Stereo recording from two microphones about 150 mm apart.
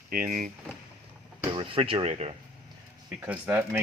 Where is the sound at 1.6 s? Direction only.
40° right (ahead or behind).